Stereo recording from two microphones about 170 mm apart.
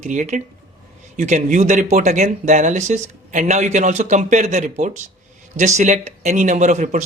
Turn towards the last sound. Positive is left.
turn(degrees=-45)  # may be behind; listen again after turning